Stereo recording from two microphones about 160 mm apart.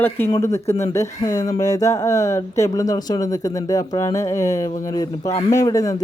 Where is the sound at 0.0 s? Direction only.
15° left (ahead or behind).